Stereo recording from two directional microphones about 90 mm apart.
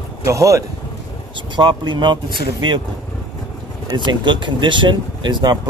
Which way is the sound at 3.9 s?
60° right (ahead or behind).